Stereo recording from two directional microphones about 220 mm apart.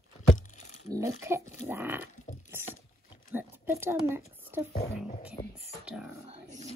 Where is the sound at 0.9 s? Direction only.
15° right (ahead or behind).